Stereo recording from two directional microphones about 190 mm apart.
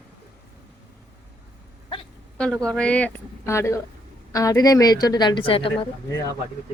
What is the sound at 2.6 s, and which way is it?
A woman's voice, 5° left (ahead or behind).